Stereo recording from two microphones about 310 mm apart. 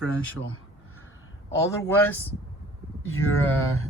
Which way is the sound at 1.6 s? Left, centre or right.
Centre.